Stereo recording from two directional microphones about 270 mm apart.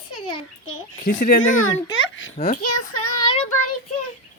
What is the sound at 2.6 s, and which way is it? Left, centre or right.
Child singing, left.